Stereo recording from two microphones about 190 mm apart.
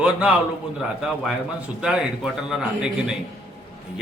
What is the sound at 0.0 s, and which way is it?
Speech, 5° right (ahead or behind).